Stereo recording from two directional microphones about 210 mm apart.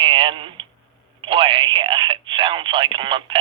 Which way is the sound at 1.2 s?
25° right (ahead or behind).